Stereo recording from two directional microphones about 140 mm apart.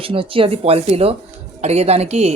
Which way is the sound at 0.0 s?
40° right (ahead or behind).